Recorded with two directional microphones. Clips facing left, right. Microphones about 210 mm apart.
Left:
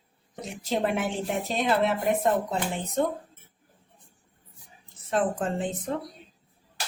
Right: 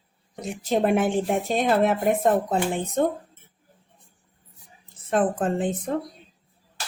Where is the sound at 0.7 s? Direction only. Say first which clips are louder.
Right 6 dB; 50° right (ahead or behind).